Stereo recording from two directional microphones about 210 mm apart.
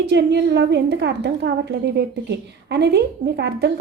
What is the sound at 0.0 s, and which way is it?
A woman's voice, 55° right (ahead or behind).